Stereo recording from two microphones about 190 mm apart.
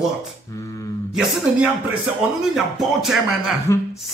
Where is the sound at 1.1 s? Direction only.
Centre (ahead or behind).